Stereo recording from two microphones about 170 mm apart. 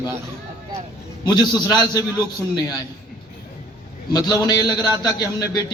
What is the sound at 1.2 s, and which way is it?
Speech, 25° left (ahead or behind).